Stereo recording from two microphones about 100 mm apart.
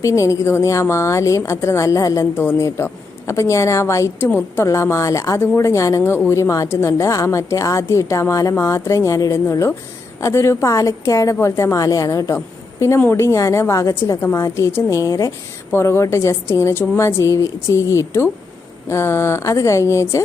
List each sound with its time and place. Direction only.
0.0 s a woman's voice: 30° left (ahead or behind)
2.3 s speech: 20° left (ahead or behind)
4.3 s speech: 20° left (ahead or behind)
4.6 s a woman's voice: 30° left (ahead or behind)